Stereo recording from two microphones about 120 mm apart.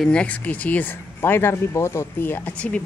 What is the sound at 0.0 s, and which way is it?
Speech, 10° left (ahead or behind).